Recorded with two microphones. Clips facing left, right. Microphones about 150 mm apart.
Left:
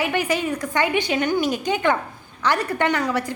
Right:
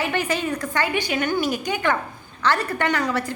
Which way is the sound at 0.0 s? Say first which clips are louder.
Left 2 dB; 15° left (ahead or behind).